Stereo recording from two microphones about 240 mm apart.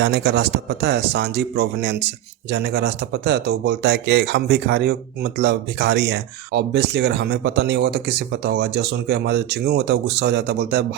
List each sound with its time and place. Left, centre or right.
0.0 s speech: right